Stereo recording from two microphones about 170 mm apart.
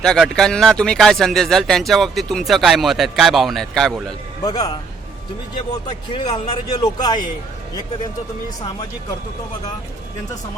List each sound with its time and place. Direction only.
0.0 s speech: 5° left (ahead or behind)
4.4 s speech: 20° left (ahead or behind)
6.1 s speech: 30° left (ahead or behind)
8.6 s speech: 25° left (ahead or behind)